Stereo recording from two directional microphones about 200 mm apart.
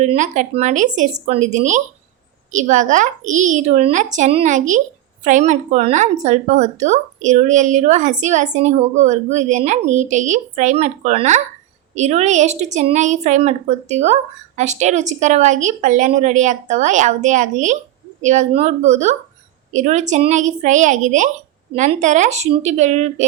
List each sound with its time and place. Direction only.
0.0 s a woman's voice: 35° right (ahead or behind)